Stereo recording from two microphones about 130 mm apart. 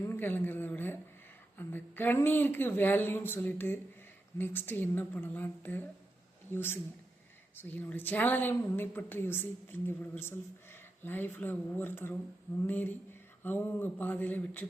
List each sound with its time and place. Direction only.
0.0 s a woman's voice: 15° left (ahead or behind)